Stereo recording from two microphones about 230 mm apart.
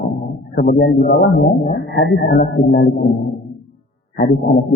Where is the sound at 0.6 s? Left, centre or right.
Left.